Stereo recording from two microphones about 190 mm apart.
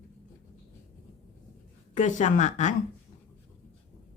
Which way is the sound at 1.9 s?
40° left (ahead or behind).